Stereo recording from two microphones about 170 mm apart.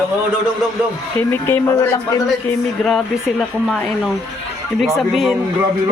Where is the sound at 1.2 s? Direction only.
10° left (ahead or behind).